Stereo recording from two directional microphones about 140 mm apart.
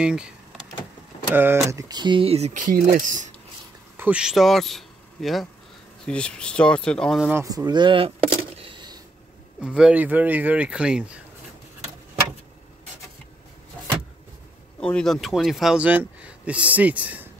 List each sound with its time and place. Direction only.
0.0 s speech: 5° right (ahead or behind)
1.3 s speech: 15° right (ahead or behind); by 3.3 s 65° right (ahead or behind)
3.9 s speech: 10° right (ahead or behind)
7.4 s a sound: 25° right (ahead or behind)
9.6 s speech: 5° right (ahead or behind)
14.8 s speech: 5° left (ahead or behind); by 17.3 s 10° right (ahead or behind)